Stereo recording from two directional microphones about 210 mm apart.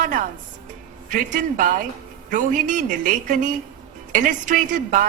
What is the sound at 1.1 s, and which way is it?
A woman's voice, 40° right (ahead or behind).